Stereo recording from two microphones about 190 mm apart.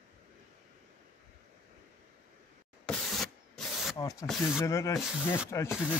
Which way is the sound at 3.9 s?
20° left (ahead or behind).